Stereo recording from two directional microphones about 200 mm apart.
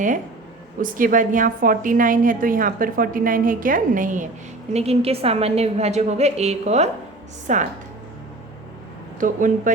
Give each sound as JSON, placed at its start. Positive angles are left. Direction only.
{"t": 0.8, "sound": "a woman's voice", "side_deg": -45}
{"t": 9.2, "sound": "a woman's voice", "side_deg": -40}